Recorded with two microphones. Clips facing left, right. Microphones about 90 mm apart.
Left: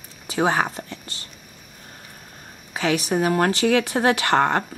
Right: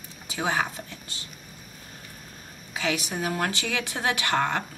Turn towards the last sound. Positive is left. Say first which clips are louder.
# left 7 dB
turn(degrees=50)  # may be behind; listen again after turning